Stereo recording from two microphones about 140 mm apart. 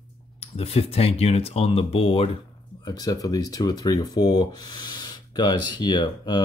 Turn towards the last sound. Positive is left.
turn(degrees=30)  # may be behind; listen again after turning